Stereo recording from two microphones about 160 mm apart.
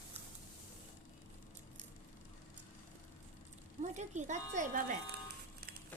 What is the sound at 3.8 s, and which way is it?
Speech, 45° right (ahead or behind).